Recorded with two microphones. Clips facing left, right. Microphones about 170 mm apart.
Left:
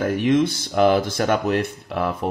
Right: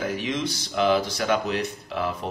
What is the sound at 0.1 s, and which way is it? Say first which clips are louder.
Speech: left 9 dB; 55° left (ahead or behind).